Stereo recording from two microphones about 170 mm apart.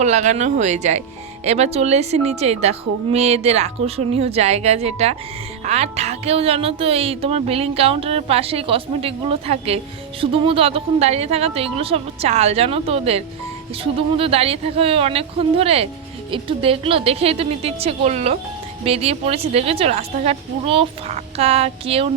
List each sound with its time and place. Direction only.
0.0 s speech: 45° right (ahead or behind)